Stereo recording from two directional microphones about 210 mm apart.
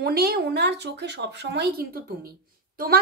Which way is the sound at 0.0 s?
45° right (ahead or behind).